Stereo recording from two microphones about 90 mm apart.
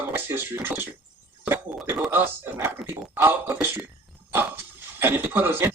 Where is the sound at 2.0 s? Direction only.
25° right (ahead or behind).